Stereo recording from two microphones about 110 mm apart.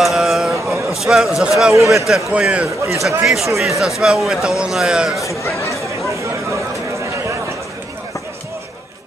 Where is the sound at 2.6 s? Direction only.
25° right (ahead or behind).